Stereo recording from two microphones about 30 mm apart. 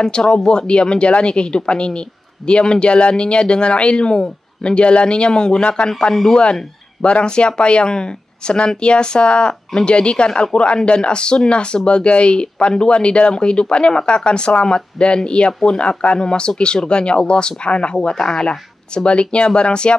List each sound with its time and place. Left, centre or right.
0.0 s speech: left
5.9 s speech: left
7.0 s speech: left
18.1 s speech: left
19.0 s speech: left